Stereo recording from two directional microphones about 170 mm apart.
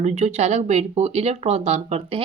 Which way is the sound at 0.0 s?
40° right (ahead or behind).